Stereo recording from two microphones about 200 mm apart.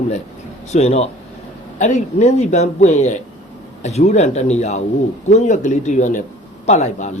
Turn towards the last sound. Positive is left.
turn(degrees=35)  # may be behind; listen again after turning